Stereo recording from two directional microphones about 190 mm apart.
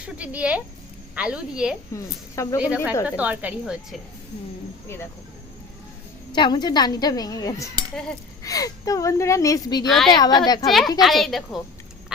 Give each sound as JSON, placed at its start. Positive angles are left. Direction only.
{"t": 0.0, "sound": "a woman's voice", "side_deg": -5}
{"t": 2.3, "sound": "speech", "side_deg": 15}
{"t": 2.6, "sound": "speech", "side_deg": -5}
{"t": 6.3, "sound": "a woman's voice", "side_deg": 25}
{"t": 10.7, "sound": "a woman's voice", "side_deg": 0}